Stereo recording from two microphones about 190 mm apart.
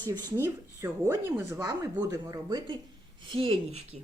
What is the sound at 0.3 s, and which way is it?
A woman's voice, 15° right (ahead or behind).